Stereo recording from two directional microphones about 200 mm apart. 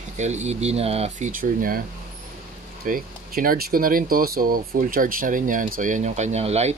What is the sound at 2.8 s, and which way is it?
Speech, 45° right (ahead or behind).